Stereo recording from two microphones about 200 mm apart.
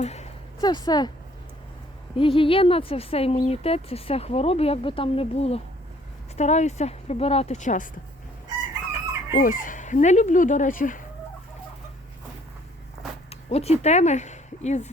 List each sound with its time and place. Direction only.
0.0 s speech: 35° left (ahead or behind)
0.6 s speech: 20° left (ahead or behind)
2.1 s speech: 25° left (ahead or behind)
9.3 s speech: 45° left (ahead or behind)
13.3 s speech: 30° left (ahead or behind)